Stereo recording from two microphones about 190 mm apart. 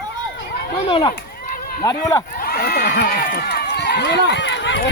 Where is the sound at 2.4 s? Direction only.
55° left (ahead or behind).